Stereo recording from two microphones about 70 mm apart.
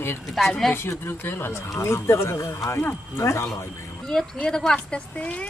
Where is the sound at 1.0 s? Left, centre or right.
Left.